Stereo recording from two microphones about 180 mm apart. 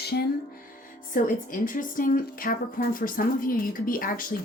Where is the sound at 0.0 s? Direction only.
60° left (ahead or behind).